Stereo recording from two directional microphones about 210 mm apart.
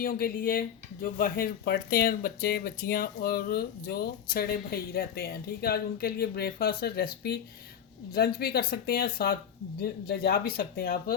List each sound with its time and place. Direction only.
0.0 s speech: 45° left (ahead or behind)